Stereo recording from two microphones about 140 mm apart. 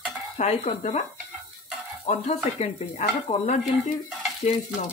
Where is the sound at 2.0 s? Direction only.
50° left (ahead or behind).